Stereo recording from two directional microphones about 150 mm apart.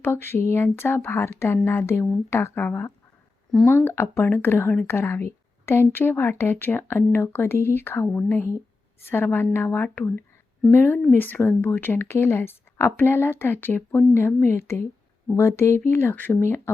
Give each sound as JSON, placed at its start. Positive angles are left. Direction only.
{"t": 0.0, "sound": "speech", "side_deg": 15}